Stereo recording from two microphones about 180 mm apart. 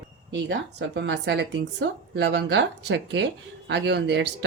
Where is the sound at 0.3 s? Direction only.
70° right (ahead or behind).